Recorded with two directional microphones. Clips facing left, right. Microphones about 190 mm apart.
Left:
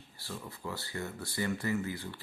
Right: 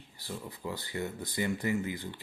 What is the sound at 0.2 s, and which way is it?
Speech, 15° right (ahead or behind).